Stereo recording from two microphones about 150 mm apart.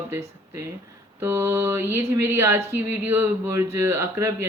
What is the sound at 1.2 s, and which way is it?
Speech, 15° right (ahead or behind).